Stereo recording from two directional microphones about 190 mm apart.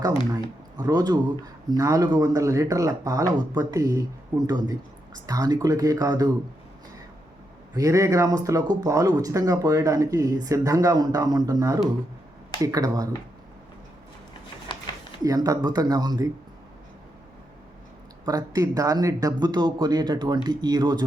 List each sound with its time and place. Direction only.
0.3 s speech: 20° right (ahead or behind)
7.8 s speech: 15° right (ahead or behind)
15.2 s speech: 20° right (ahead or behind)
18.3 s speech: 20° right (ahead or behind)